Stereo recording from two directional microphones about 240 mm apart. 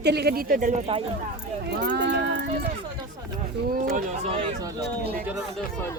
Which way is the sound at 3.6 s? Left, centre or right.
Right.